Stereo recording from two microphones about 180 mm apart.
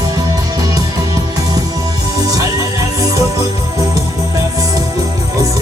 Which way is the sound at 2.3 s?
20° right (ahead or behind).